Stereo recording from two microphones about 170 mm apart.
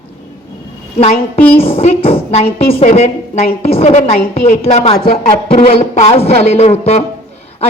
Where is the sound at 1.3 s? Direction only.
10° left (ahead or behind).